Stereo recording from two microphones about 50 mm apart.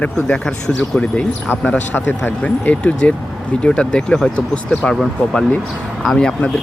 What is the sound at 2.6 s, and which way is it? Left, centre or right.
Speech, left.